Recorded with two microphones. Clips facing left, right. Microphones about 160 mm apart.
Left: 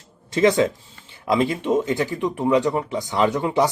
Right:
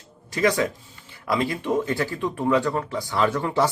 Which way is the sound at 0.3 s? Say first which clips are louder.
Left 5 dB; 25° left (ahead or behind).